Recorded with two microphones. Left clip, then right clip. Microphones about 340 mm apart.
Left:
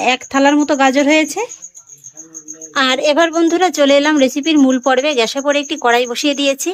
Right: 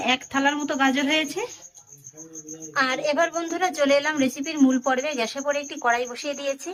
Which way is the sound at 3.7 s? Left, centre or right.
Centre.